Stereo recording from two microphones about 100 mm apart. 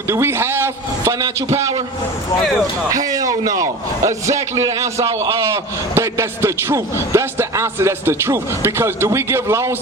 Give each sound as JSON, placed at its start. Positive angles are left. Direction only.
{"t": 0.1, "sound": "a man's voice", "side_deg": -25}
{"t": 2.9, "sound": "a man's voice", "side_deg": -35}